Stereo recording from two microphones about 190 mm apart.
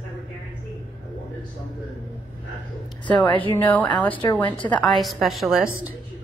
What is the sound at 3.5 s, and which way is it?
Speech, 10° left (ahead or behind).